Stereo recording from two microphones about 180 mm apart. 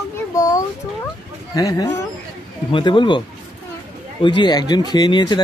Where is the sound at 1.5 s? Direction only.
20° left (ahead or behind).